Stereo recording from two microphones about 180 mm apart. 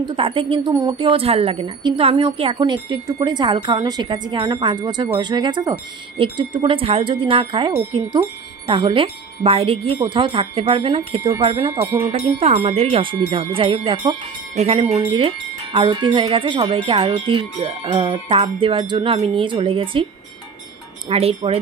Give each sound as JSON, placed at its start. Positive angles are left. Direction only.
{"t": 0.0, "sound": "a woman's voice", "side_deg": -30}
{"t": 21.1, "sound": "speech", "side_deg": -35}